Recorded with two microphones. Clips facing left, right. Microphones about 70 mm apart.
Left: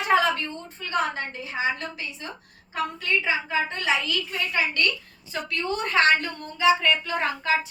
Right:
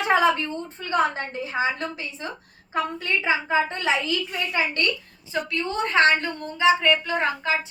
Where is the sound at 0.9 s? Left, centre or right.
Right.